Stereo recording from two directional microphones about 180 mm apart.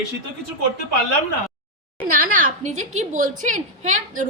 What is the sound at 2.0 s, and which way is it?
A woman's voice, 50° right (ahead or behind).